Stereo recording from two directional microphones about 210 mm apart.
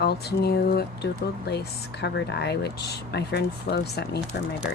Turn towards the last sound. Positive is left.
turn(degrees=45)  # may be behind; listen again after turning